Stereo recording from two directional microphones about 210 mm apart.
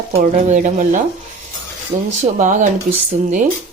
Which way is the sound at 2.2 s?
35° right (ahead or behind).